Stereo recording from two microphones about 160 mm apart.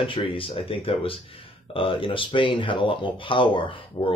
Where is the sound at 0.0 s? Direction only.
35° left (ahead or behind).